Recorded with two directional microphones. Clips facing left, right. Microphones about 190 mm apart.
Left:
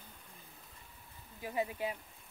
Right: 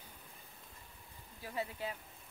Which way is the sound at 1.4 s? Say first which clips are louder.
Left 4 dB; 15° left (ahead or behind).